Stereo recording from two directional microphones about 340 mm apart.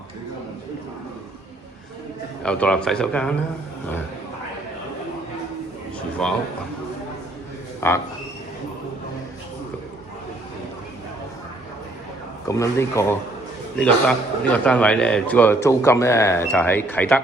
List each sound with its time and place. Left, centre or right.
2.4 s a man's voice: centre
7.8 s speech: centre
12.5 s a man's voice: centre